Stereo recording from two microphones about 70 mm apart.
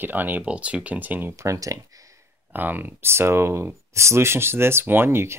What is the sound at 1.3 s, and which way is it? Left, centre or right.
Speech, right.